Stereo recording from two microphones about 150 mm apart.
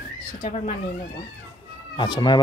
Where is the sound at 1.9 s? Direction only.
30° left (ahead or behind).